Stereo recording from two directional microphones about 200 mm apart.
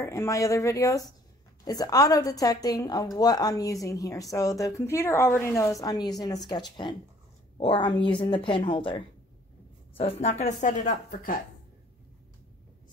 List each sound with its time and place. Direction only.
0.0 s a woman's voice: 15° left (ahead or behind); by 11.0 s 40° left (ahead or behind)